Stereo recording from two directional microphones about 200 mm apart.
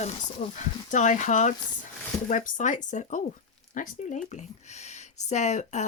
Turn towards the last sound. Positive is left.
turn(degrees=35)  # may be behind; listen again after turning